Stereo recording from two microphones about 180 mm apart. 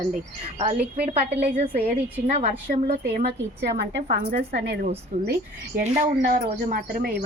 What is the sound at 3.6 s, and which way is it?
A woman's voice, 70° right (ahead or behind).